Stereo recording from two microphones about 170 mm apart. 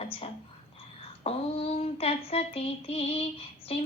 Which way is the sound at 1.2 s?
35° left (ahead or behind).